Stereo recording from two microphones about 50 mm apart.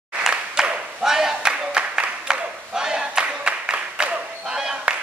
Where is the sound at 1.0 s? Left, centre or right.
Centre.